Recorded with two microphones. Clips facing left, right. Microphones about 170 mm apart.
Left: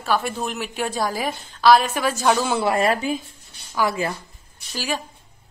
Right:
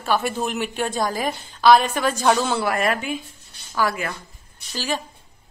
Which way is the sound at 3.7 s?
15° left (ahead or behind).